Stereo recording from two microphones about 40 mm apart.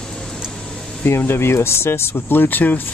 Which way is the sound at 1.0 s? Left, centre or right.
Left.